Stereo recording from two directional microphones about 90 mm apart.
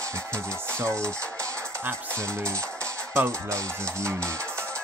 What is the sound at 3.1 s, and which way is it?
Speech, 30° right (ahead or behind).